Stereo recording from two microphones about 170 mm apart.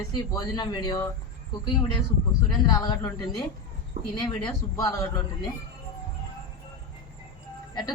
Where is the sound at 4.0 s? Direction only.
60° right (ahead or behind).